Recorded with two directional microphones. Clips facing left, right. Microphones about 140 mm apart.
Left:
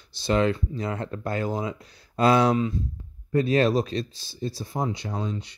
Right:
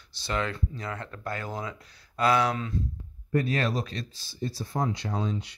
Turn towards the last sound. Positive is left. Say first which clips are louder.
# even
turn(degrees=0)  # may be behind; listen again after turning